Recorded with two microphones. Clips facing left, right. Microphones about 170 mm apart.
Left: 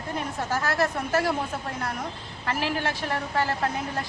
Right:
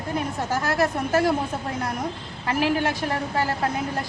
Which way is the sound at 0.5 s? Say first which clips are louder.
Right 2 dB; 15° right (ahead or behind).